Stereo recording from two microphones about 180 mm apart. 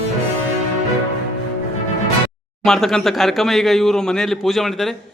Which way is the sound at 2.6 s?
Centre (ahead or behind).